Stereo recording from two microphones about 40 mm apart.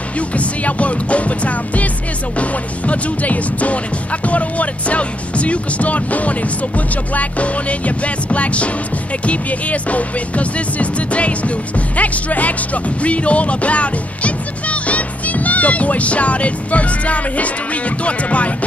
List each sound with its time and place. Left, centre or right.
0.3 s music: left